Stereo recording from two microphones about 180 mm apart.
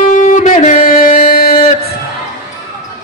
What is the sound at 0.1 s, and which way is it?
Music, 45° left (ahead or behind).